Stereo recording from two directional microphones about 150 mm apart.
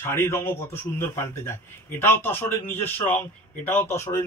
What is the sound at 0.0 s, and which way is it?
A man's voice, 15° left (ahead or behind).